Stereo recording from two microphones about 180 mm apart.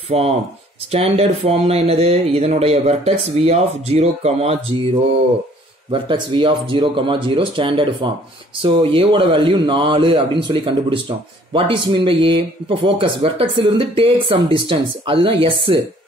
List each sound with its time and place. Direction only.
0.1 s speech: 35° right (ahead or behind)
5.9 s a man's voice: 25° right (ahead or behind)